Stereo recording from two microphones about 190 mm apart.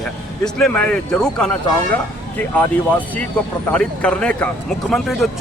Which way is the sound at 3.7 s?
5° left (ahead or behind).